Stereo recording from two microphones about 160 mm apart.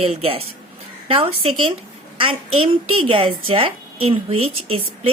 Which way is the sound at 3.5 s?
35° right (ahead or behind).